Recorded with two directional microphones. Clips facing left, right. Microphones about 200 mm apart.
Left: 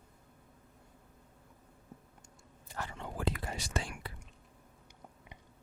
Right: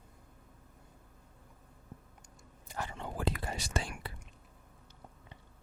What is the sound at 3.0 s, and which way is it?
Whispering, 35° right (ahead or behind).